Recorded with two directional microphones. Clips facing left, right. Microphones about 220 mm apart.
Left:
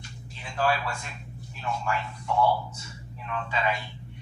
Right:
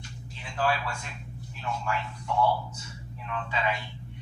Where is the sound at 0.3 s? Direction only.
40° left (ahead or behind).